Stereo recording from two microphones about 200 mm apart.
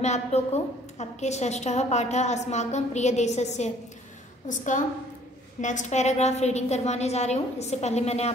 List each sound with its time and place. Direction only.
0.0 s a woman's voice: 35° left (ahead or behind)